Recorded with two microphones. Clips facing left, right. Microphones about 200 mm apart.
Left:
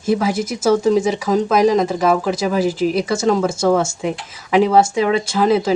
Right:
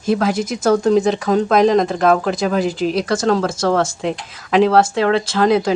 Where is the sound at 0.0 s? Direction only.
5° left (ahead or behind).